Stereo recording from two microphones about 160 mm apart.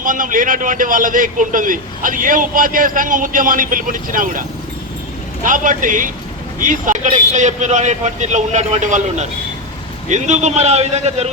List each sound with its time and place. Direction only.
0.0 s a man's voice: 55° right (ahead or behind)